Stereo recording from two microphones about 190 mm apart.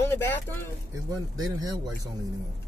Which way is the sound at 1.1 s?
20° right (ahead or behind).